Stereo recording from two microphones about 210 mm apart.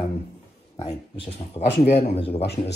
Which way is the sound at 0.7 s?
25° left (ahead or behind).